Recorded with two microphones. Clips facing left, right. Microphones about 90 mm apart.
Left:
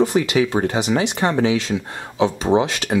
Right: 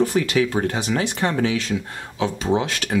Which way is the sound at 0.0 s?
20° left (ahead or behind).